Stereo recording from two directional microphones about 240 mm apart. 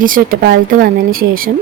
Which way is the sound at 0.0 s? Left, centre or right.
Right.